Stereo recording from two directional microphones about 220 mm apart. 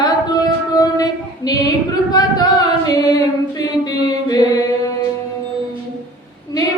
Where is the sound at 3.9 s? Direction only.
15° left (ahead or behind).